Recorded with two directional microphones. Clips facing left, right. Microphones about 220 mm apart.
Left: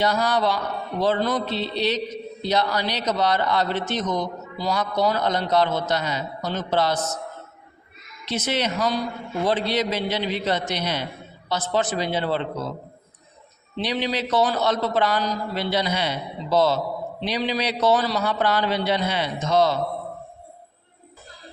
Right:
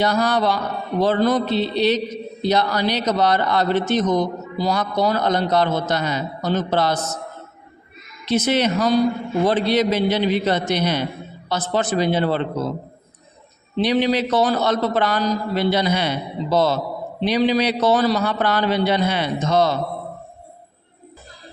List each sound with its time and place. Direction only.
0.0 s a man's voice: 50° right (ahead or behind)
8.2 s a man's voice: 50° right (ahead or behind)
13.8 s a man's voice: 50° right (ahead or behind)